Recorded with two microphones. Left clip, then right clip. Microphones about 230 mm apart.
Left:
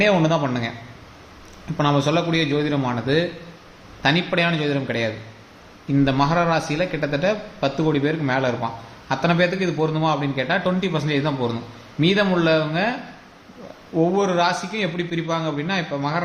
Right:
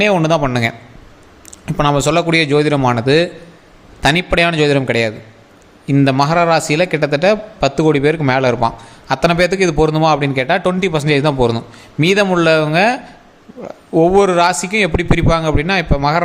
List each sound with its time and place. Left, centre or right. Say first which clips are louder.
0.0 s a man's voice: right 5 dB; right
1.7 s a man's voice: right 6 dB; right